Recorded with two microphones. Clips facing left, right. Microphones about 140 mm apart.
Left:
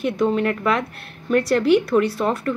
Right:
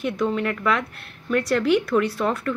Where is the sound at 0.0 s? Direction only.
25° left (ahead or behind).